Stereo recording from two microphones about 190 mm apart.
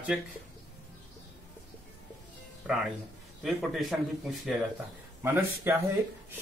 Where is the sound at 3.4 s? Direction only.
Centre (ahead or behind).